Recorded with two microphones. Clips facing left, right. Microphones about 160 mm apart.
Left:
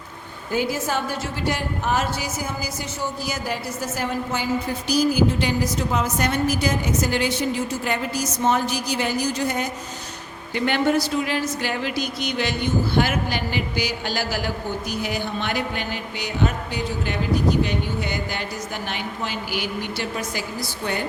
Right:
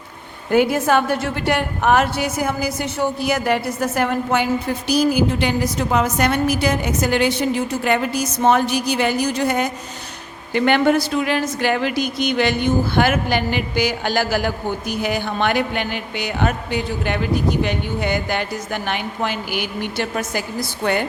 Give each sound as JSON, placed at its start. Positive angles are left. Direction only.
{"t": 0.5, "sound": "speech", "side_deg": -60}